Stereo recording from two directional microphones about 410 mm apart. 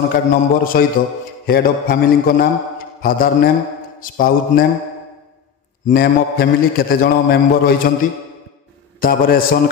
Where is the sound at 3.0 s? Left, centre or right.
Left.